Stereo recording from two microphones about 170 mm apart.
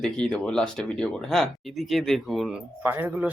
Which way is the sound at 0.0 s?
5° left (ahead or behind).